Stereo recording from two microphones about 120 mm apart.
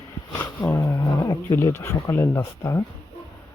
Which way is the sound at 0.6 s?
25° left (ahead or behind).